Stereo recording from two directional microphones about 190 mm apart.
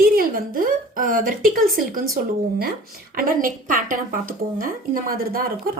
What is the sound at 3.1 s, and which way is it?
A woman's voice, 50° right (ahead or behind).